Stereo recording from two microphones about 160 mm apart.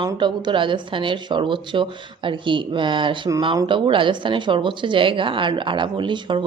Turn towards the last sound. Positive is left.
turn(degrees=-30)  # may be behind; listen again after turning